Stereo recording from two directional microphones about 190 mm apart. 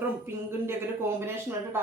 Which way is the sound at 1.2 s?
15° right (ahead or behind).